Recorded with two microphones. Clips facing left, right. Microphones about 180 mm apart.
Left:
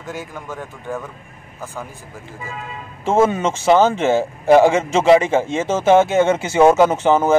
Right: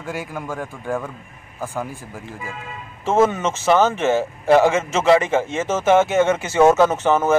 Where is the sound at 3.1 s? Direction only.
10° left (ahead or behind).